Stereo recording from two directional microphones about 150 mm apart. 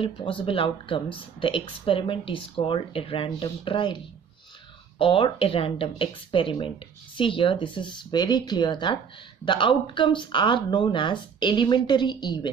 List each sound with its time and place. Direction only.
0.0 s speech: 35° left (ahead or behind)